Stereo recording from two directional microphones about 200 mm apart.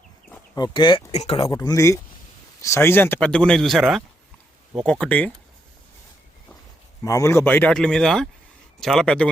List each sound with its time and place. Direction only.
0.5 s speech: 20° left (ahead or behind)
1.5 s speech: 15° left (ahead or behind)
7.0 s speech: 15° left (ahead or behind)